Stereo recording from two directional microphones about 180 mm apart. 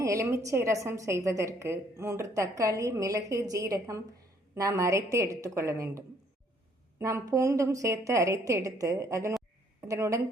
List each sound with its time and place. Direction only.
0.0 s a woman's voice: 15° right (ahead or behind)
7.0 s a woman's voice: 15° right (ahead or behind)